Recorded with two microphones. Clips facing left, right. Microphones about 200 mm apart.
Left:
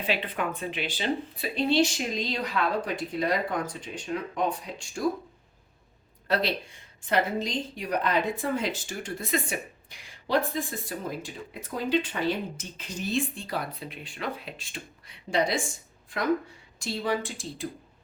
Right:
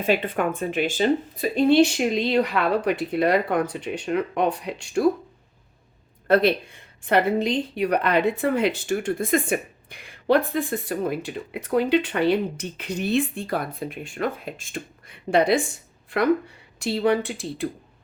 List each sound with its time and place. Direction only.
0.0 s a woman's voice: 50° right (ahead or behind); by 5.0 s 65° right (ahead or behind)
6.2 s a woman's voice: 55° right (ahead or behind)
16.8 s a woman's voice: 65° right (ahead or behind)